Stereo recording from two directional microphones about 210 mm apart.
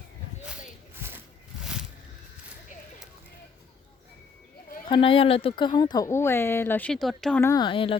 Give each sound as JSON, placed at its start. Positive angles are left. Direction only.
{"t": 4.9, "sound": "speech", "side_deg": 25}
{"t": 7.5, "sound": "speech", "side_deg": 20}